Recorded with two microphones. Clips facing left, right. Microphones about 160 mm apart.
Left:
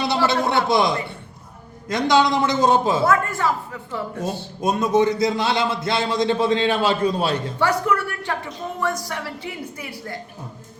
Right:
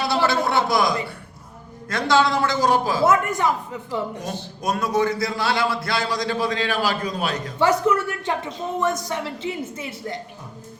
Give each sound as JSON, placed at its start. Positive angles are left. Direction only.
{"t": 0.3, "sound": "a man's voice", "side_deg": 20}
{"t": 3.0, "sound": "a woman's voice", "side_deg": -20}
{"t": 4.6, "sound": "a man's voice", "side_deg": 25}
{"t": 7.6, "sound": "a woman's voice", "side_deg": -20}